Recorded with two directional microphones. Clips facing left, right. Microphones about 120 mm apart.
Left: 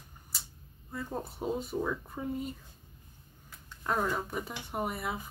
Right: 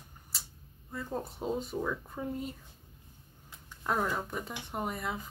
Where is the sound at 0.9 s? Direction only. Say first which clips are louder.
Even; 5° left (ahead or behind).